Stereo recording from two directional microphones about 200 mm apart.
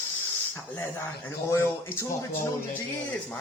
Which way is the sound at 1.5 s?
10° left (ahead or behind).